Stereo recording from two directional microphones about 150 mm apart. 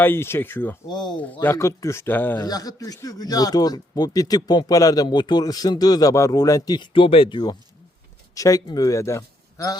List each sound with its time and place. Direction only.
0.0 s speech: 15° left (ahead or behind)
0.9 s speech: 30° left (ahead or behind)
1.3 s speech: 15° left (ahead or behind)
2.4 s speech: 25° left (ahead or behind)